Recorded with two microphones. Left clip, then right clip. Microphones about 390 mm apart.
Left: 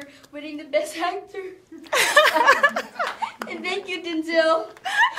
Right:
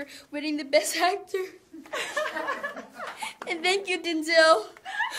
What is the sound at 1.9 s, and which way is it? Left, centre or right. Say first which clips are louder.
Speech: left 14 dB; left.